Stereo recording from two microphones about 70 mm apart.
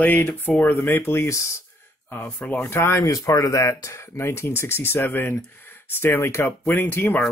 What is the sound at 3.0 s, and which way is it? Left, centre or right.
Speech, left.